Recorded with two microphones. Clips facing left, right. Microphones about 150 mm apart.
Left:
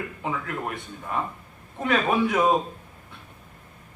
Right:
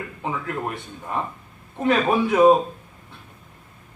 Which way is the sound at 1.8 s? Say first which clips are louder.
Right 3 dB; 30° right (ahead or behind).